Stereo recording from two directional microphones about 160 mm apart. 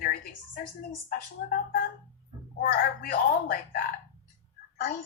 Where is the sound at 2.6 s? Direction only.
65° left (ahead or behind).